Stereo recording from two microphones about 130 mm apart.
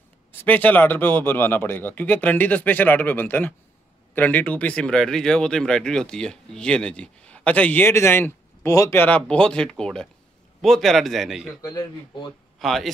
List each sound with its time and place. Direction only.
0.4 s a man's voice: 15° left (ahead or behind)
11.6 s speech: 35° left (ahead or behind)
12.5 s speech: centre (ahead or behind)